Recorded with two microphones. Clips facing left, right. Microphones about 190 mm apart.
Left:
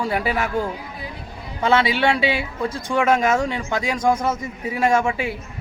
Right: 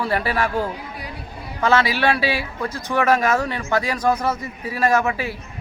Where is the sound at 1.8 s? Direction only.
25° left (ahead or behind).